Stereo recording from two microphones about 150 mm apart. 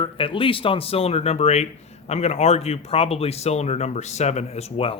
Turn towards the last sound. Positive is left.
turn(degrees=40)  # may be behind; listen again after turning